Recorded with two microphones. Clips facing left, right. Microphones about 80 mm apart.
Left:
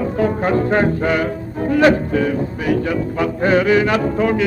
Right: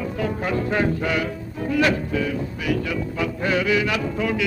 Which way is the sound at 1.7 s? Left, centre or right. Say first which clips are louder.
Left 7 dB; left.